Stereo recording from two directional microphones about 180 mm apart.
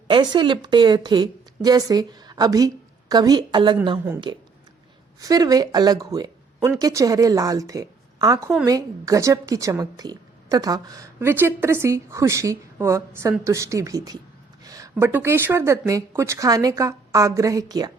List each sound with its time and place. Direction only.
0.1 s a woman's voice: 25° right (ahead or behind)